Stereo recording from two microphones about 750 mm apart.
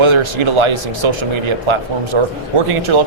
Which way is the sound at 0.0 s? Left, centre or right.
Right.